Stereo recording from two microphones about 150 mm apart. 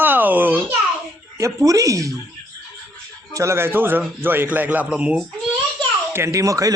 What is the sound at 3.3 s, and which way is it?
A man's voice, 20° right (ahead or behind).